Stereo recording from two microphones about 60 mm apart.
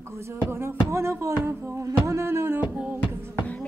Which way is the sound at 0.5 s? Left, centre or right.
Right.